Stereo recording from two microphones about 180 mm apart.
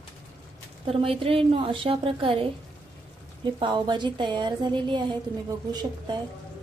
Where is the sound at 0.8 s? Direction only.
30° right (ahead or behind).